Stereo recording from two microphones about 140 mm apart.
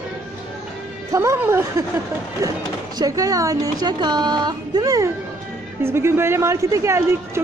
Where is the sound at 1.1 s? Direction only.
20° right (ahead or behind).